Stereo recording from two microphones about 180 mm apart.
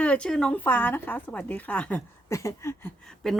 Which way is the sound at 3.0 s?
Centre (ahead or behind).